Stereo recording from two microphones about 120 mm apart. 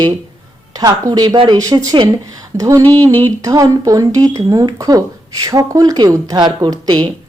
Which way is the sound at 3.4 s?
30° right (ahead or behind).